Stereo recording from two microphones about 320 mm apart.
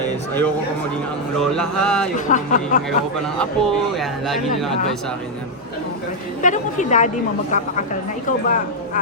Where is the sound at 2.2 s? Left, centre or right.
Left.